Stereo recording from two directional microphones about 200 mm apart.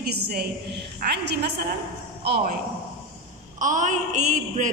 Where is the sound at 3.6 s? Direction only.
40° right (ahead or behind).